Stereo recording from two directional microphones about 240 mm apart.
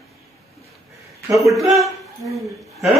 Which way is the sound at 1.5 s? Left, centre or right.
Centre.